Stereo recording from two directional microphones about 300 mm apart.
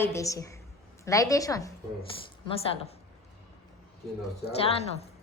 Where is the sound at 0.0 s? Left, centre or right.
Centre.